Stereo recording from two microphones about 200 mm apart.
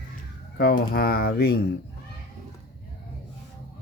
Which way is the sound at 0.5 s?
50° left (ahead or behind).